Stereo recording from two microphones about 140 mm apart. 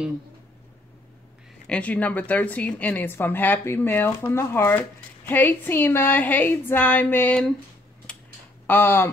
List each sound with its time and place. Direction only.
1.7 s a woman's voice: 10° left (ahead or behind)
8.1 s typing: 10° left (ahead or behind)
8.6 s a woman's voice: 15° left (ahead or behind)